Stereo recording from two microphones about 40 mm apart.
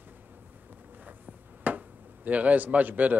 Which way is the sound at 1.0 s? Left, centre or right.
Right.